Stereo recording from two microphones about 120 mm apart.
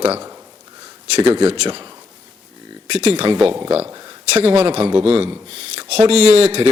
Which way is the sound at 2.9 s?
55° right (ahead or behind).